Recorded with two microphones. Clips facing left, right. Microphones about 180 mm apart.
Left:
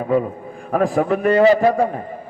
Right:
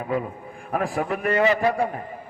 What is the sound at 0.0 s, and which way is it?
A man's voice, 30° left (ahead or behind).